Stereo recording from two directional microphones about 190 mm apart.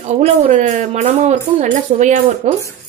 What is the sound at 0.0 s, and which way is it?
A woman's voice, 35° right (ahead or behind).